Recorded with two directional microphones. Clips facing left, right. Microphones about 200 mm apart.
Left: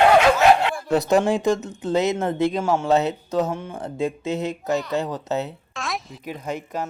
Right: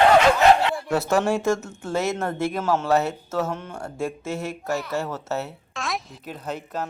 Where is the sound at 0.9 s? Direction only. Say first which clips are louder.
Left 4 dB; 20° left (ahead or behind).